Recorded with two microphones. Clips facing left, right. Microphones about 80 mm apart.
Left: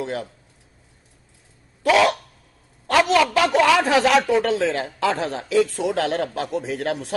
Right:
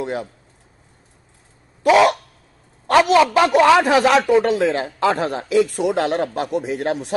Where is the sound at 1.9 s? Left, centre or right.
Right.